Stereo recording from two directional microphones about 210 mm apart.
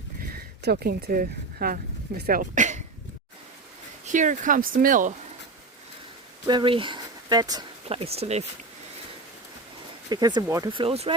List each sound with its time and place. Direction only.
0.2 s speech: 45° right (ahead or behind)
4.0 s speech: 35° right (ahead or behind)
6.5 s speech: 20° right (ahead or behind)
10.1 s speech: 20° right (ahead or behind)